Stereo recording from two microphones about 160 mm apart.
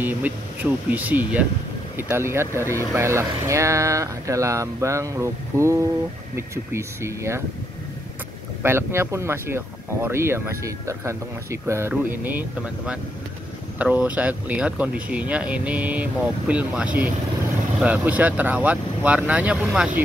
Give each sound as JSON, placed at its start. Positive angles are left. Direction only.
{"t": 0.0, "sound": "speech", "side_deg": -10}
{"t": 8.6, "sound": "speech", "side_deg": -15}